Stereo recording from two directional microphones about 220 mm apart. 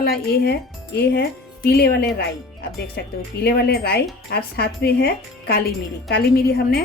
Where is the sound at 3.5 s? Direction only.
45° left (ahead or behind).